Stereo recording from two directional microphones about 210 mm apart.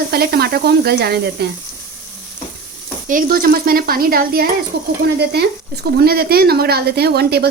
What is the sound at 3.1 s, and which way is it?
Speech, 40° right (ahead or behind).